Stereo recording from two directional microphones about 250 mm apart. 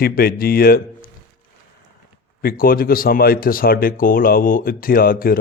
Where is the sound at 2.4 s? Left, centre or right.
Left.